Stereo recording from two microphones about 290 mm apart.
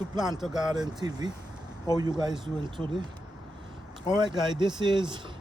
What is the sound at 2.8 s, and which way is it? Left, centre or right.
Speech, centre.